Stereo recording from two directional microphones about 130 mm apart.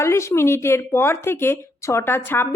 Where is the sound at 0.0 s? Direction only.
20° left (ahead or behind).